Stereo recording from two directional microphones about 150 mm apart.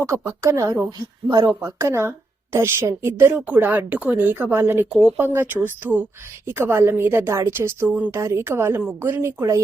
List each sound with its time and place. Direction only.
0.0 s a woman's voice: 20° right (ahead or behind)